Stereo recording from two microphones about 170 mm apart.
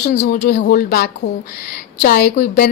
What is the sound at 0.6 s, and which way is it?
Speech, 65° left (ahead or behind).